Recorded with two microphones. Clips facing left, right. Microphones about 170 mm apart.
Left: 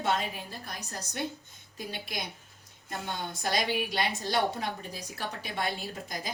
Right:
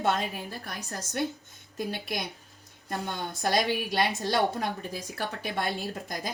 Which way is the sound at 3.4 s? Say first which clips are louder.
Right 3 dB; 55° right (ahead or behind).